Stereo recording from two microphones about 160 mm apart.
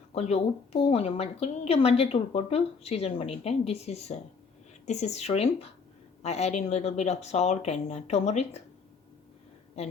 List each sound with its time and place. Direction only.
0.1 s a woman's voice: 40° left (ahead or behind)